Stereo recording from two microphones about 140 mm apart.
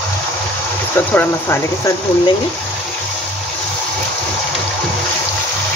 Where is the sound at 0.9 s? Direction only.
15° left (ahead or behind).